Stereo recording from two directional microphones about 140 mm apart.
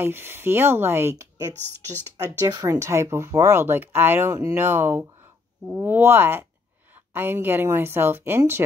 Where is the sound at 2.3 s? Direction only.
25° right (ahead or behind).